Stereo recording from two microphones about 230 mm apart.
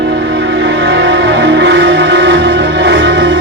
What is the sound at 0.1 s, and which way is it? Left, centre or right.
Music, right.